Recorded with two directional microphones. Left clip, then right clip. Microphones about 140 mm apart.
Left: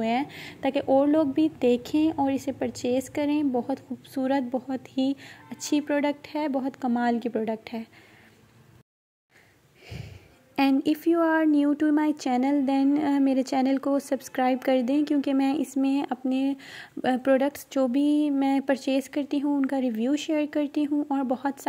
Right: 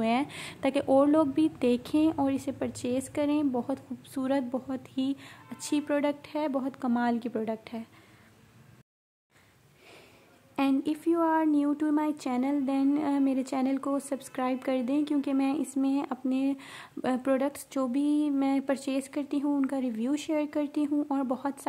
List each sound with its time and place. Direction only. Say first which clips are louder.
0.0 s speech: left 2 dB; centre (ahead or behind); by 7.9 s 15° left (ahead or behind)
10.5 s speech: left 5 dB; 25° left (ahead or behind)